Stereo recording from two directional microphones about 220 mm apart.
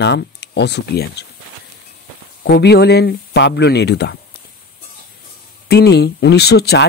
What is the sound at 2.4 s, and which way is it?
Speech, 50° left (ahead or behind).